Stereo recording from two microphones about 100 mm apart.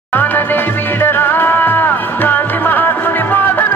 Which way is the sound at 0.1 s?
20° left (ahead or behind).